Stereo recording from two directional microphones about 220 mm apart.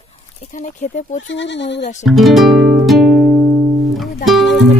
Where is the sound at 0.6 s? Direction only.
35° left (ahead or behind).